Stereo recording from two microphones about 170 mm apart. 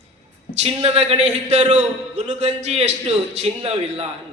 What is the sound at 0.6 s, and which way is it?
A man's voice, 35° right (ahead or behind).